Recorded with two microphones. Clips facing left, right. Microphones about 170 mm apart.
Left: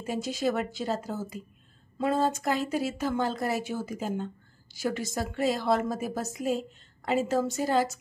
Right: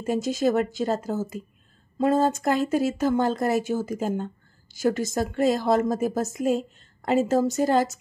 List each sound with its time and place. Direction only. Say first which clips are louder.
0.0 s speech: right 6 dB; 45° right (ahead or behind)